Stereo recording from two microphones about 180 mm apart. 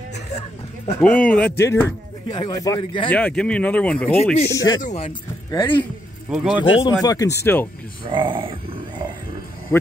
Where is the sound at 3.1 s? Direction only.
5° left (ahead or behind).